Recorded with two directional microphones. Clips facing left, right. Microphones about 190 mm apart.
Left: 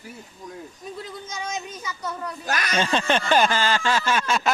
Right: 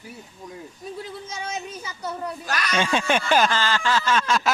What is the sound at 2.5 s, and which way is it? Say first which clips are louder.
Speech: left 3 dB; 50° left (ahead or behind).